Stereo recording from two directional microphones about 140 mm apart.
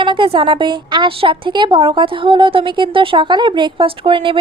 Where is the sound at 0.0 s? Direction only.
35° right (ahead or behind).